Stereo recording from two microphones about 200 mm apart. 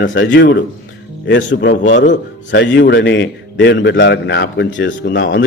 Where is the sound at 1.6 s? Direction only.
65° left (ahead or behind).